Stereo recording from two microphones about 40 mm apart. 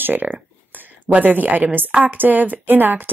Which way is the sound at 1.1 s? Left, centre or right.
Right.